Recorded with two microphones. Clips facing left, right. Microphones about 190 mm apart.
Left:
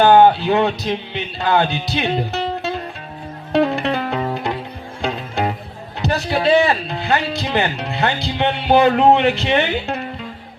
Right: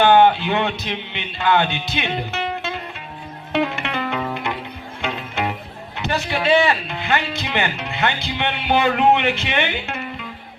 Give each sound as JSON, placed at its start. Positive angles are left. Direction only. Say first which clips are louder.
{"t": 0.0, "sound": "music", "louder": "left 3 dB", "side_deg": 35}
{"t": 6.0, "sound": "speech", "louder": "left 3 dB", "side_deg": 35}